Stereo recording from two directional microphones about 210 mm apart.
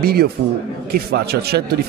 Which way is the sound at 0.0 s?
45° right (ahead or behind).